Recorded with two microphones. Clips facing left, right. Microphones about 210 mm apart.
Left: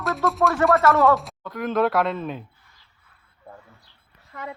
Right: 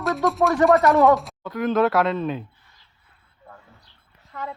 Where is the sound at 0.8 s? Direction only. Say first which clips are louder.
Right 2 dB; 15° right (ahead or behind).